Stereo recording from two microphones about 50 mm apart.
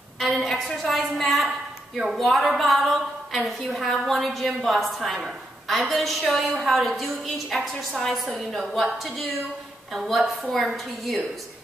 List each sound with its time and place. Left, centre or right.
0.4 s a woman's voice: centre